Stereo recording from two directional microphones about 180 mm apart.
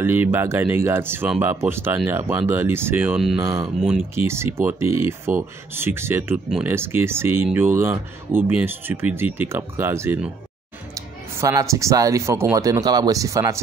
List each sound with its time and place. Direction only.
0.0 s speech: 10° right (ahead or behind)
3.4 s speech: 15° right (ahead or behind)